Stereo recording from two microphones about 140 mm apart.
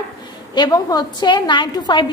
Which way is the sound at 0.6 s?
25° left (ahead or behind).